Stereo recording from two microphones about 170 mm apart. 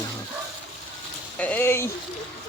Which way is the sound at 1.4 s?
10° left (ahead or behind).